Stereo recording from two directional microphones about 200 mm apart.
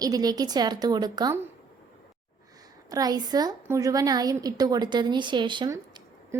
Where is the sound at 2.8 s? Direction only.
20° right (ahead or behind).